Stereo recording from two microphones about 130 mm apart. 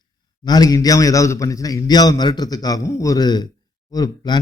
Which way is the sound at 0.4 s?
30° left (ahead or behind).